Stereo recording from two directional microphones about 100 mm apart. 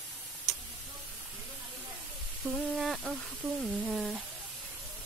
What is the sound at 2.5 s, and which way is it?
Speech, centre (ahead or behind).